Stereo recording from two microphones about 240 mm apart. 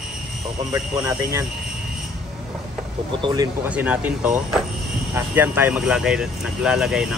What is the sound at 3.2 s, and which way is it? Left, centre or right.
Speech, centre.